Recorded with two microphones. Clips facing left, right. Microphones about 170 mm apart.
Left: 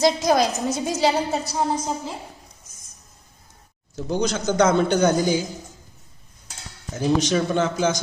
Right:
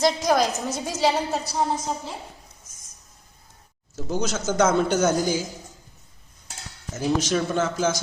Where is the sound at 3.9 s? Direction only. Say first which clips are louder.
Left 3 dB; 5° right (ahead or behind).